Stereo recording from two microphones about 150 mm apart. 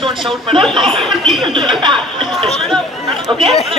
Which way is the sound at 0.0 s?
35° right (ahead or behind).